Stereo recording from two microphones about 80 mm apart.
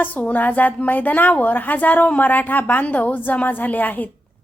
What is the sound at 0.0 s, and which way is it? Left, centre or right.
A woman's voice, centre.